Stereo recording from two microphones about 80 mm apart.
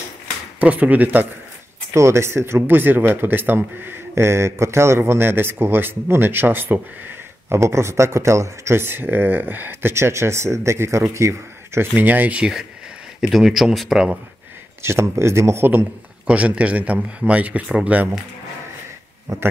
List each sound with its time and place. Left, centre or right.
0.6 s speech: centre
2.0 s speech: right
11.9 s speech: right
13.3 s speech: centre
14.8 s speech: right
16.3 s speech: centre